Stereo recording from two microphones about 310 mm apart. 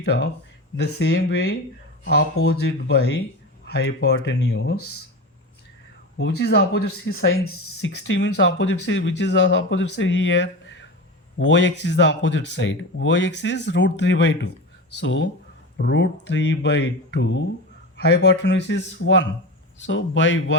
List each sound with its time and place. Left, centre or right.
0.0 s speech: left
6.1 s speech: left